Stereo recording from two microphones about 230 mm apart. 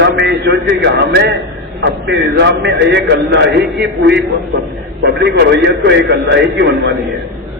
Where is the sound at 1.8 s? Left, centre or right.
Right.